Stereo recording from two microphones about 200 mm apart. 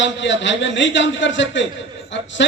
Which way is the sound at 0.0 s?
65° left (ahead or behind).